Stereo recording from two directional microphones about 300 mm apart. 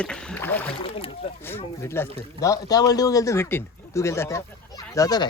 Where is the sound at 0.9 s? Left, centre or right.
Centre.